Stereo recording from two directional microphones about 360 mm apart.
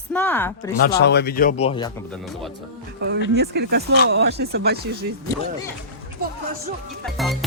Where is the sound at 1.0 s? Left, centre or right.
Left; by 2.2 s centre.